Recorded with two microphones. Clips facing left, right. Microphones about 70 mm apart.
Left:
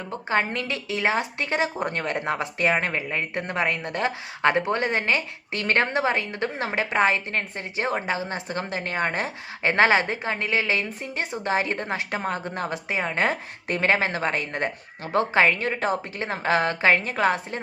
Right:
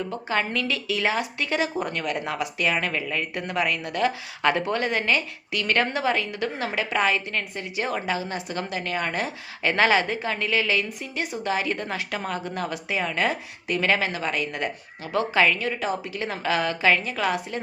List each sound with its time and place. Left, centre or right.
0.1 s a woman's voice: left